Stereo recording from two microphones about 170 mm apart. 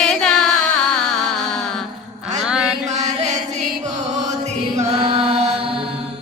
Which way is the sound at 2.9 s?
40° right (ahead or behind).